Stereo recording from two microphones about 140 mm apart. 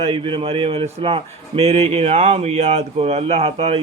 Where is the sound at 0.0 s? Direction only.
40° right (ahead or behind).